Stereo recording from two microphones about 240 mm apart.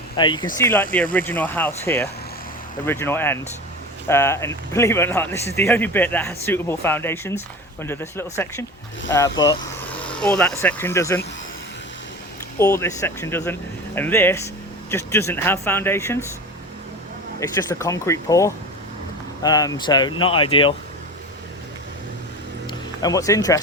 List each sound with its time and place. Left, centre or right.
0.2 s speech: centre
0.6 s speech: centre
9.9 s speech: centre
12.5 s speech: centre
17.6 s speech: centre
23.0 s speech: centre